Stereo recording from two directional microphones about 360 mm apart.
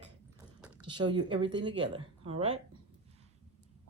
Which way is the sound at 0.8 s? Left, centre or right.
Centre.